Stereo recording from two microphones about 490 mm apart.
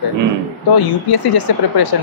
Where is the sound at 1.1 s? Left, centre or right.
Left.